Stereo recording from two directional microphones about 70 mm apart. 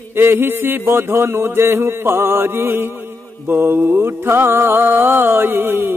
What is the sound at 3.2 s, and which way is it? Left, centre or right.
Mantra, left.